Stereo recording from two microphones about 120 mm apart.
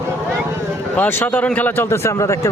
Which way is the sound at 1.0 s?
15° left (ahead or behind).